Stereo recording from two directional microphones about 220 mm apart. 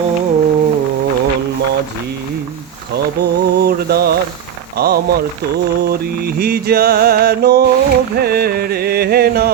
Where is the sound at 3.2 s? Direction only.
45° right (ahead or behind).